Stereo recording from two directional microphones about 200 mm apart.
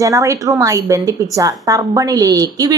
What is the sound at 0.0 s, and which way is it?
Speech, 15° right (ahead or behind).